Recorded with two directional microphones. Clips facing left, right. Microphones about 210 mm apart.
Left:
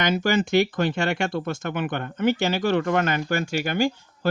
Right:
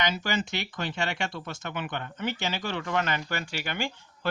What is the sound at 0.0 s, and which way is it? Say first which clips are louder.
Speech: left 7 dB; 50° left (ahead or behind).